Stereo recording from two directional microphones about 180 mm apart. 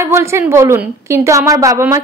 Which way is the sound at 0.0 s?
15° right (ahead or behind).